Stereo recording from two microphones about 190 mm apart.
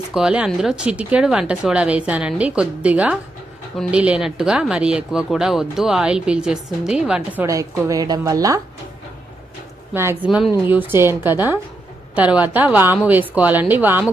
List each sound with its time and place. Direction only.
0.1 s speech: 5° right (ahead or behind)
7.4 s a woman's voice: 15° right (ahead or behind)
9.9 s a woman's voice: 15° right (ahead or behind)